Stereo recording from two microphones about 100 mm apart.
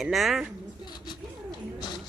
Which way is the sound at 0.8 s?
45° left (ahead or behind).